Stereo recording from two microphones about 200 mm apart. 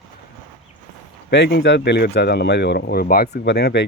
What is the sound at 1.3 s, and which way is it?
Speech, 60° left (ahead or behind).